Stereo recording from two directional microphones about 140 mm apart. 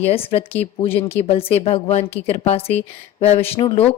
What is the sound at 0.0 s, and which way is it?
A woman's voice, 45° left (ahead or behind).